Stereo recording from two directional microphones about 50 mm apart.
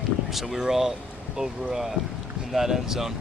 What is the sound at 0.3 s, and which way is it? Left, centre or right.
Speech, centre.